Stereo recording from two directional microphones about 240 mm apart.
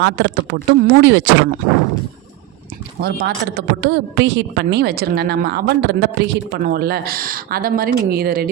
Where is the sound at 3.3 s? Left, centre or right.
Right.